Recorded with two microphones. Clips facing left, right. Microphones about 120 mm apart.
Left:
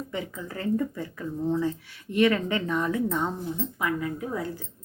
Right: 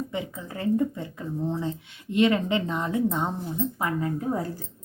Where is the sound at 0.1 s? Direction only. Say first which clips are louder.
Right 1 dB; 20° right (ahead or behind).